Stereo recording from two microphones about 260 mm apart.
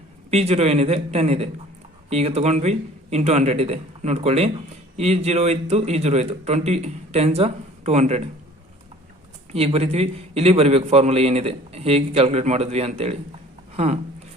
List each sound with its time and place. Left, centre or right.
0.3 s a man's voice: right
9.5 s a man's voice: right